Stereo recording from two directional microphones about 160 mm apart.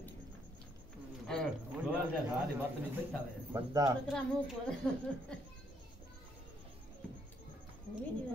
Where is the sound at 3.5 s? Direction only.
20° right (ahead or behind).